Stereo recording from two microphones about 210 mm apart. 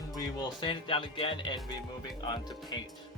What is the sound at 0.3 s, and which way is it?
Speech, 25° left (ahead or behind).